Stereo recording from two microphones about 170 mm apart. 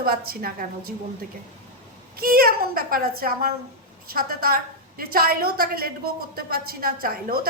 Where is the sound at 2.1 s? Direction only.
60° right (ahead or behind).